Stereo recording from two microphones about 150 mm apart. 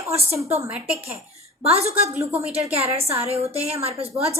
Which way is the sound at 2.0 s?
20° right (ahead or behind).